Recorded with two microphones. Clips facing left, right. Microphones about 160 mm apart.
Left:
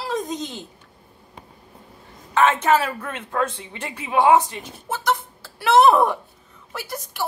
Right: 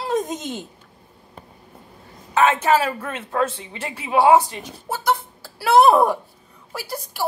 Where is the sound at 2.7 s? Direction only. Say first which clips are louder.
Right 1 dB; 30° right (ahead or behind).